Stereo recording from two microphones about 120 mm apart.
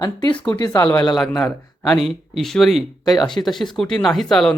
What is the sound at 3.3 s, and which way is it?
Speech, 5° left (ahead or behind).